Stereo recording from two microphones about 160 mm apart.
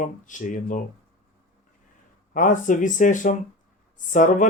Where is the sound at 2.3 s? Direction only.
55° left (ahead or behind).